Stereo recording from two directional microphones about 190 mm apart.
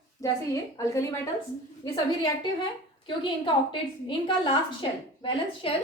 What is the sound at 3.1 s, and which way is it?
A woman's voice, 25° left (ahead or behind).